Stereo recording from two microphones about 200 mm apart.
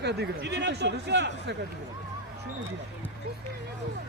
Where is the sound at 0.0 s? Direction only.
55° right (ahead or behind).